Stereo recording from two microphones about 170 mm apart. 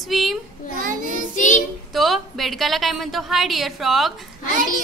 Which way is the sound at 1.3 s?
45° left (ahead or behind).